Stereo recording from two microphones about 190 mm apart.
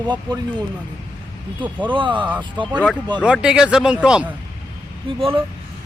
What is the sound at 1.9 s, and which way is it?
Speech, 25° right (ahead or behind).